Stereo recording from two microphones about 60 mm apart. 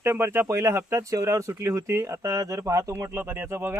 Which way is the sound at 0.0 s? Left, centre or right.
Right.